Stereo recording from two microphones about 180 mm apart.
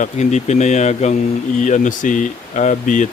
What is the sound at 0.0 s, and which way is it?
Speech, 40° left (ahead or behind).